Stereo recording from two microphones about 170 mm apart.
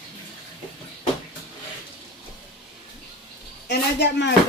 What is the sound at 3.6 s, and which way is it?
Speech, 85° left.